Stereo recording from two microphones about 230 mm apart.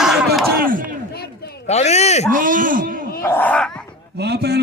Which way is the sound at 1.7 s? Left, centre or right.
Left.